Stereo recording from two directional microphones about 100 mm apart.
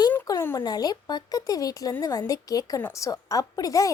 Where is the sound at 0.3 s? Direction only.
35° left (ahead or behind).